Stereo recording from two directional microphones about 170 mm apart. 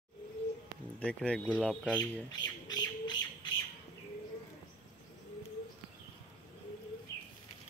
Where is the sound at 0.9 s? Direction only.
5° left (ahead or behind).